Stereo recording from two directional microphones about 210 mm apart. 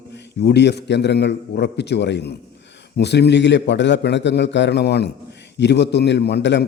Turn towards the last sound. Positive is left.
turn(degrees=55)  # may be behind; listen again after turning